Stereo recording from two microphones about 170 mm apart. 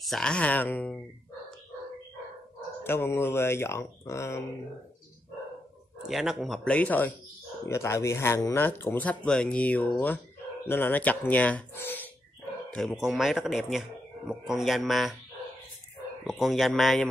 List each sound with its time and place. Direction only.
0.0 s speech: 5° left (ahead or behind)
2.8 s speech: 15° left (ahead or behind)
6.0 s speech: centre (ahead or behind)
12.7 s speech: centre (ahead or behind)
16.3 s speech: centre (ahead or behind)